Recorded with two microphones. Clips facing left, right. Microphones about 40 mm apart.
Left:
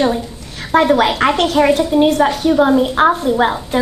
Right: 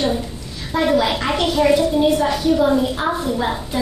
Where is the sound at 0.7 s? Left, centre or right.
Left.